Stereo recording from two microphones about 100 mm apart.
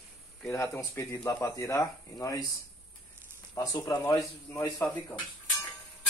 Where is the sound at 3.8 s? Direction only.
35° left (ahead or behind).